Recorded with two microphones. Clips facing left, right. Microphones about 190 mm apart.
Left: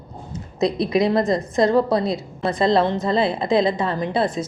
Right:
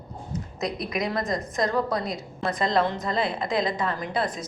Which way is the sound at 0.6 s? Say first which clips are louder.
Left 10 dB; 30° left (ahead or behind).